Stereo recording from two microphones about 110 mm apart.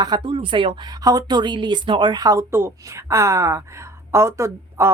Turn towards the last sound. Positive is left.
turn(degrees=-25)  # may be behind; listen again after turning